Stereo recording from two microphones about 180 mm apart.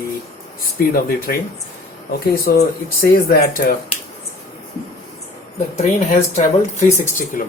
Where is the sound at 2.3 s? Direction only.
55° left (ahead or behind).